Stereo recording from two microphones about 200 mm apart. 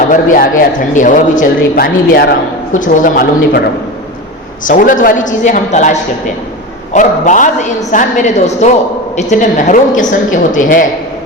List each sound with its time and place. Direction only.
0.1 s speech: 40° left (ahead or behind)
2.7 s a woman's voice: 40° left (ahead or behind)
4.6 s a woman's voice: 40° left (ahead or behind)